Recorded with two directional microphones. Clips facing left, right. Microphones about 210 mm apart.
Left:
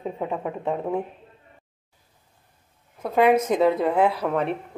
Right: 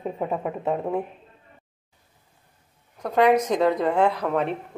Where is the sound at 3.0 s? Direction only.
5° left (ahead or behind).